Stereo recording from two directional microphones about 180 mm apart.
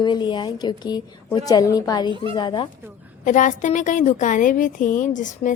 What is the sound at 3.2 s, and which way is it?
A woman's voice, 45° left (ahead or behind).